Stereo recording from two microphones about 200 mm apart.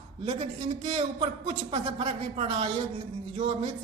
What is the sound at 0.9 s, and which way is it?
A man's voice, 30° right (ahead or behind).